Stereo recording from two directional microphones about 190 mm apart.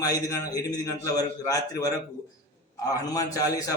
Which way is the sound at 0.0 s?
20° left (ahead or behind).